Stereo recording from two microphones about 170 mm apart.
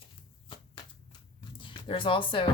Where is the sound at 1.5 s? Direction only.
30° left (ahead or behind).